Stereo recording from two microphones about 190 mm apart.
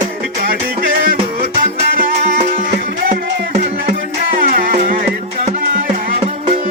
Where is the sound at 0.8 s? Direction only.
50° right (ahead or behind).